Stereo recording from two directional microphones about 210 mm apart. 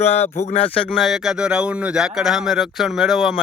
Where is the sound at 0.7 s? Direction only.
5° left (ahead or behind).